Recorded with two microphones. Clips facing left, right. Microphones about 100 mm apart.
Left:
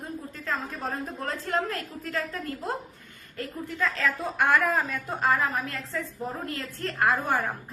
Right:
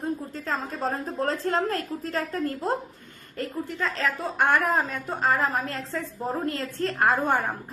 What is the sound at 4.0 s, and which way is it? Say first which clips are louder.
A woman's voice: right 3 dB; 25° right (ahead or behind).